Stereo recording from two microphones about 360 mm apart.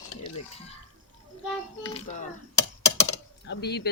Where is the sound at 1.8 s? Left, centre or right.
Centre.